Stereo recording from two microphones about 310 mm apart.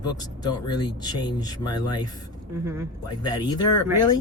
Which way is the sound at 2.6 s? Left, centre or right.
Centre.